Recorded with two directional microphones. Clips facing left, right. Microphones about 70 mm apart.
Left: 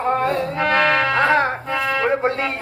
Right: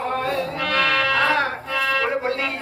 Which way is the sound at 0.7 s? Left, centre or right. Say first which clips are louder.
Left 3 dB; left.